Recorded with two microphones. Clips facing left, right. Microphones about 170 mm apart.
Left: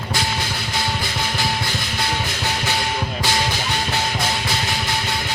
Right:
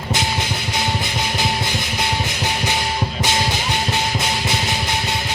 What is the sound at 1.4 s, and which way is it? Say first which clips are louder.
Music: right 2 dB; 20° right (ahead or behind).